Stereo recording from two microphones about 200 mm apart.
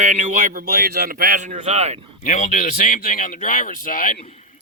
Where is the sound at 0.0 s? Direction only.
40° right (ahead or behind).